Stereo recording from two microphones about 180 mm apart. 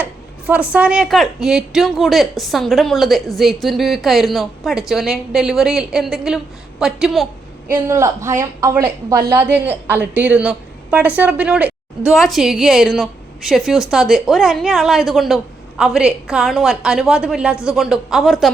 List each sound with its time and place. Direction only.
0.0 s speech: 10° right (ahead or behind)
7.7 s a woman's voice: 15° right (ahead or behind); by 18.5 s centre (ahead or behind)